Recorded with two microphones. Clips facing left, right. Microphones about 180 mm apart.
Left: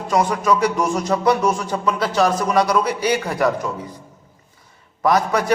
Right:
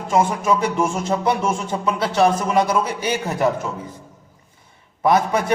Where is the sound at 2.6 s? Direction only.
50° right (ahead or behind).